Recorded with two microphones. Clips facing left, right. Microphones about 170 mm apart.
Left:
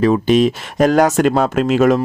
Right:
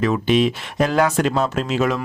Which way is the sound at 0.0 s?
40° left (ahead or behind).